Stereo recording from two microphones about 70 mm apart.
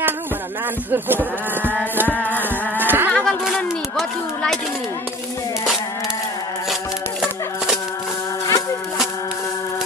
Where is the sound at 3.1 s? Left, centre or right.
Centre.